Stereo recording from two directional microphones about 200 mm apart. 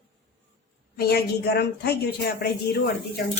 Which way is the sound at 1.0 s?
50° left (ahead or behind).